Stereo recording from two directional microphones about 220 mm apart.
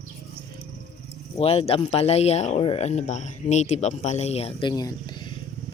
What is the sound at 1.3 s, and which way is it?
Speech, 25° left (ahead or behind).